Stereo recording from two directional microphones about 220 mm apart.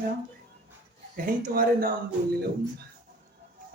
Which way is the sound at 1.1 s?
40° right (ahead or behind).